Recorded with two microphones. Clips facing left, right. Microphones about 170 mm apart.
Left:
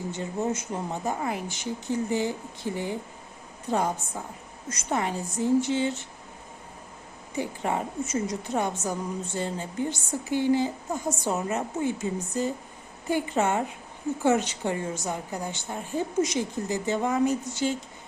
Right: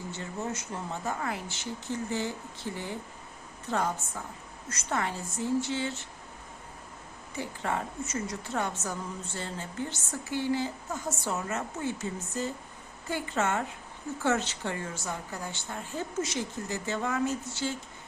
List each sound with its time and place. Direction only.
0.1 s a woman's voice: 20° left (ahead or behind)
7.3 s a woman's voice: 15° left (ahead or behind)